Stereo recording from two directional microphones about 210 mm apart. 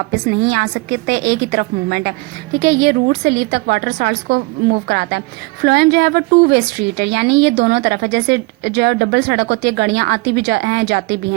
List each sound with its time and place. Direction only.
0.1 s a woman's voice: 50° right (ahead or behind)